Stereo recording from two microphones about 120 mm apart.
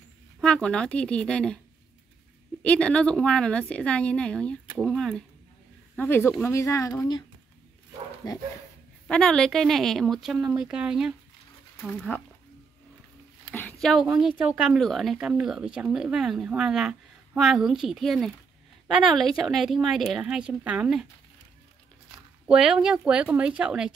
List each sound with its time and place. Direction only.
0.4 s a woman's voice: 10° left (ahead or behind)
2.6 s a woman's voice: 10° left (ahead or behind)
5.9 s a woman's voice: 20° left (ahead or behind)
8.2 s speech: 35° left (ahead or behind)
9.0 s speech: 5° left (ahead or behind)
13.5 s a sound: 10° left (ahead or behind)
14.4 s speech: 5° right (ahead or behind)
22.5 s speech: 5° right (ahead or behind)